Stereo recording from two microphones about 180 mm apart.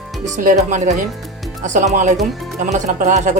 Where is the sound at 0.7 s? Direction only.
45° right (ahead or behind).